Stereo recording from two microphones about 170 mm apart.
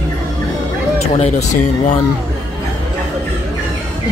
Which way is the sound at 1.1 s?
40° left (ahead or behind).